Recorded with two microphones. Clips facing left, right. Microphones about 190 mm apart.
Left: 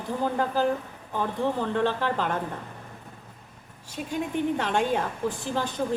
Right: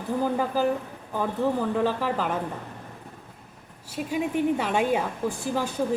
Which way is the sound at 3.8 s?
5° right (ahead or behind).